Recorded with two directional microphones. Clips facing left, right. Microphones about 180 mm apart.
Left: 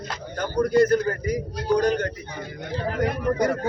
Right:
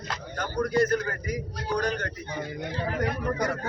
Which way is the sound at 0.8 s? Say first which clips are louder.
Left 6 dB; 35° left (ahead or behind).